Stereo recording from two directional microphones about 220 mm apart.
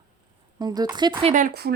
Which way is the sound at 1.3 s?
40° right (ahead or behind).